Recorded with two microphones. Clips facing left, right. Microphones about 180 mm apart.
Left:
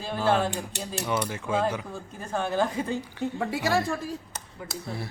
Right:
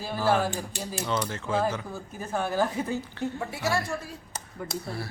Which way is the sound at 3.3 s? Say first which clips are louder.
Left 5 dB; 75° left (ahead or behind).